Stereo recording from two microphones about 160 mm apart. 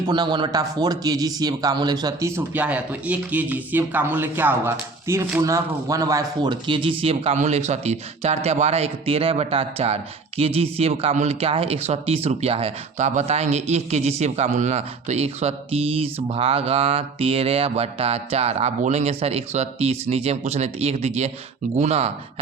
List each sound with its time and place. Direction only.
0.1 s speech: 30° right (ahead or behind)